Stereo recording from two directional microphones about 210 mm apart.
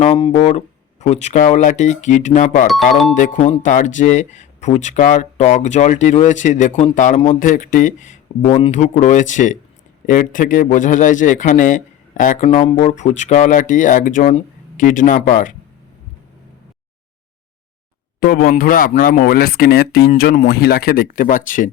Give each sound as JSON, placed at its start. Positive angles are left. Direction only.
{"t": 0.0, "sound": "a man's voice", "side_deg": 25}
{"t": 2.9, "sound": "speech", "side_deg": 0}
{"t": 3.2, "sound": "a man's voice", "side_deg": 35}
{"t": 18.2, "sound": "speech", "side_deg": 45}